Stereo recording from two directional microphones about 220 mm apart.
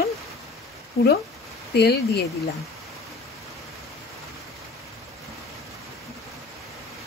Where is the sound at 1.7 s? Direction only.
45° left (ahead or behind).